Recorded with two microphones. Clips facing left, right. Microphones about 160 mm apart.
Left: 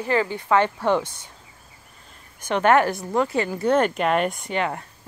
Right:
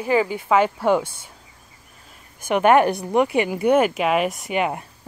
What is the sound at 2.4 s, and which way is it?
Speech, 10° right (ahead or behind).